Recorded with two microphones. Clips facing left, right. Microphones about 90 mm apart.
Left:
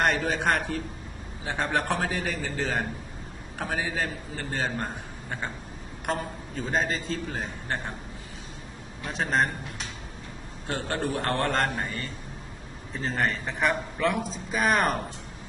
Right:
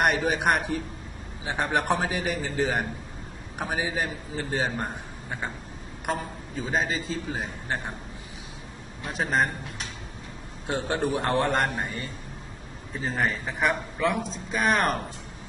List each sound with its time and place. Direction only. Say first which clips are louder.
0.0 s a man's voice: right 1 dB; 15° right (ahead or behind)
9.1 s a man's voice: even; 5° right (ahead or behind)
10.7 s a man's voice: right 3 dB; 20° right (ahead or behind)
13.0 s a man's voice: even; 5° right (ahead or behind)